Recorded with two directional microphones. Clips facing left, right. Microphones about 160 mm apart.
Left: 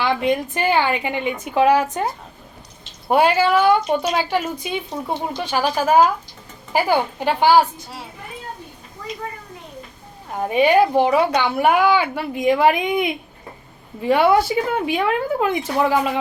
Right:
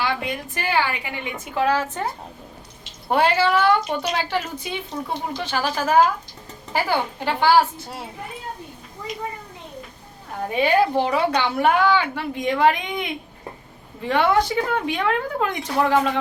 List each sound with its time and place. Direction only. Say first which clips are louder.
0.0 s a woman's voice: left 6 dB; 20° left (ahead or behind)
3.1 s a woman's voice: left 3 dB; 10° left (ahead or behind)
10.5 s a woman's voice: left 4 dB; 15° left (ahead or behind)